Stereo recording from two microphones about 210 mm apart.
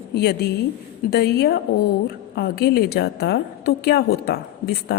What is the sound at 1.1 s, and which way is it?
A woman's voice, 50° left (ahead or behind).